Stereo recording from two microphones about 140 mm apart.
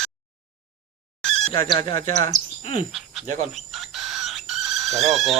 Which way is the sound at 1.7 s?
40° left (ahead or behind).